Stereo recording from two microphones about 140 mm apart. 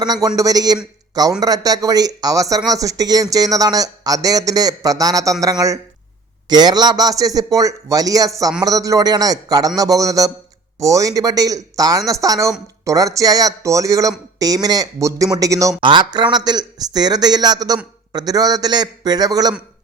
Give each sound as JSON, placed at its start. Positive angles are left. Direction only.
{"t": 0.0, "sound": "speech", "side_deg": -30}
{"t": 15.8, "sound": "speech", "side_deg": -35}